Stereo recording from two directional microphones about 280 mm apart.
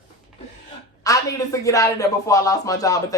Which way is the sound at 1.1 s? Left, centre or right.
Centre.